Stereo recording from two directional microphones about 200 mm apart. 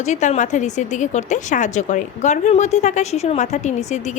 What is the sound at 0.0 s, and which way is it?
A woman's voice, 35° left (ahead or behind).